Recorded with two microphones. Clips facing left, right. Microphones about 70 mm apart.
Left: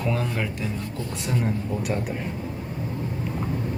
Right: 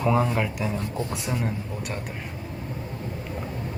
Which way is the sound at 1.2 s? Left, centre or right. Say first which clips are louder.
Left 5 dB; centre.